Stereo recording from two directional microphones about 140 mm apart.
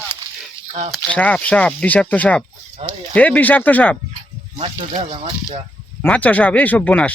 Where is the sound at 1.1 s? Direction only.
10° left (ahead or behind).